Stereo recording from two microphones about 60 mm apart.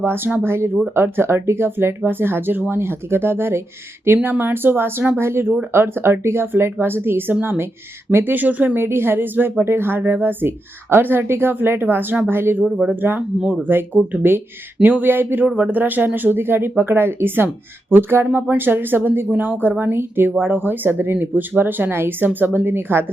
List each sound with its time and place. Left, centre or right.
0.0 s speech: right